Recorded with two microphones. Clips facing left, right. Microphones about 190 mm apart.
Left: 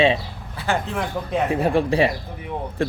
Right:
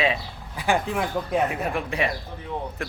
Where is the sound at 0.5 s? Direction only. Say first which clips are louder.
Even; 15° right (ahead or behind).